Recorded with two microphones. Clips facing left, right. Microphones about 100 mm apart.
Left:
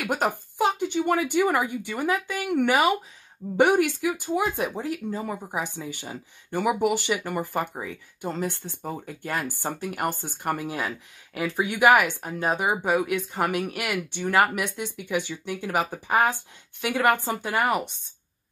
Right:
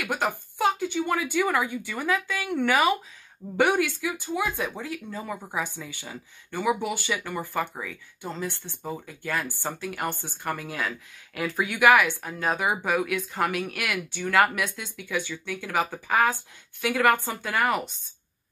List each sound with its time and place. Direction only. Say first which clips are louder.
0.0 s a woman's voice: left 2 dB; 35° left (ahead or behind)
10.6 s speech: left 2 dB; 25° left (ahead or behind)